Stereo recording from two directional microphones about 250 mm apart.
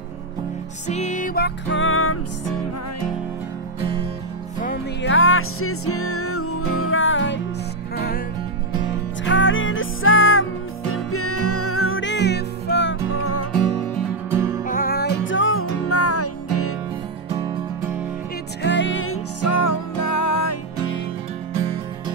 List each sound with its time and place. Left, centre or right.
0.8 s music: left
5.0 s music: left
9.2 s music: left
13.2 s music: left
14.3 s music: centre
14.6 s music: left
17.4 s music: centre
18.6 s music: left